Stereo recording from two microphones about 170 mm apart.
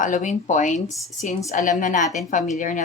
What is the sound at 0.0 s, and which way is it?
A woman's voice, 50° left (ahead or behind).